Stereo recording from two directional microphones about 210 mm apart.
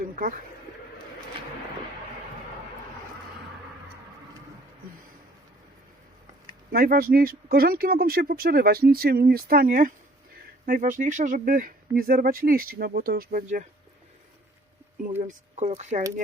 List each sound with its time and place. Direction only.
6.7 s speech: 45° right (ahead or behind)
15.2 s speech: 35° right (ahead or behind)